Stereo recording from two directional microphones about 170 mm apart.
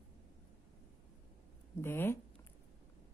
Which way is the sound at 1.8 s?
15° left (ahead or behind).